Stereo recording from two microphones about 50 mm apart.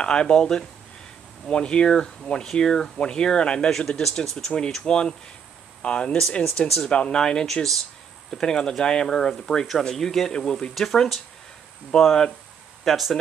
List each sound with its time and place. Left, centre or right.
0.0 s speech: centre
10.7 s speech: centre
12.8 s speech: centre